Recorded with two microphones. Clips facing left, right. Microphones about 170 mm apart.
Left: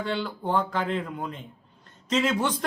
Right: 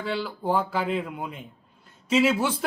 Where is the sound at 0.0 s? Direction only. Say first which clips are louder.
Even; 5° right (ahead or behind).